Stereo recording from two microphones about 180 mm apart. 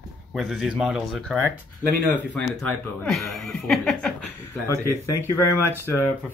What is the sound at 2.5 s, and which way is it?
Speech, 5° left (ahead or behind).